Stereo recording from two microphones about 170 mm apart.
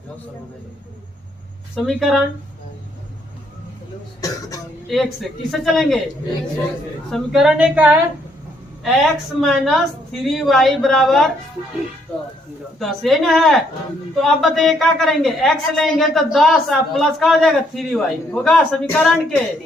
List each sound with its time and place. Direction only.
1.7 s a woman's voice: centre (ahead or behind)
4.2 s speech: 20° left (ahead or behind)
4.9 s a woman's voice: centre (ahead or behind)
7.1 s a woman's voice: centre (ahead or behind)
9.4 s a woman's voice: centre (ahead or behind)
12.8 s a woman's voice: centre (ahead or behind)